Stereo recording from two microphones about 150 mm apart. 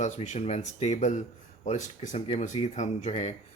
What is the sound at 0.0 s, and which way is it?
Speech, 50° left (ahead or behind).